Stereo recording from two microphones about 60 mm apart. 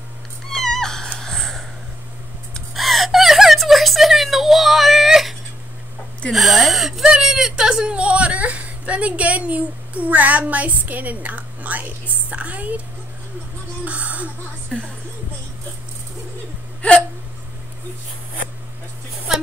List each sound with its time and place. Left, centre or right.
0.5 s neigh: centre
1.2 s a sound: centre
2.7 s whimper: centre
6.3 s speech: centre; by 12.8 s right
13.8 s speech: right